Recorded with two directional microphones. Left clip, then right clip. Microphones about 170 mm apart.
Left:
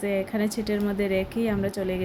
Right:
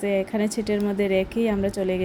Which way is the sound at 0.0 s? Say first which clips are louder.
Right 3 dB; 10° right (ahead or behind).